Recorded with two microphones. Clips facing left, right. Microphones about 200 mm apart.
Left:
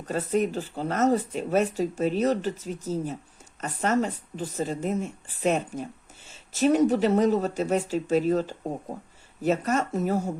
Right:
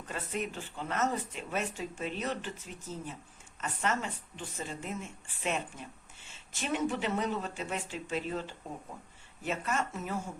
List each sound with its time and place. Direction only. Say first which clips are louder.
0.0 s speech: left 11 dB; 40° left (ahead or behind)